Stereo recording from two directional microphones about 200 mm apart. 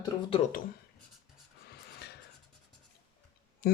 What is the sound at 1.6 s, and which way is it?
Music, 55° left (ahead or behind).